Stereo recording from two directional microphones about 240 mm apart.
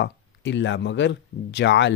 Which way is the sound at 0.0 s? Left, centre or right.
Left.